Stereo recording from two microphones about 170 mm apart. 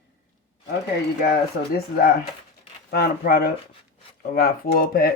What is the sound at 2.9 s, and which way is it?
Speech, 65° left (ahead or behind).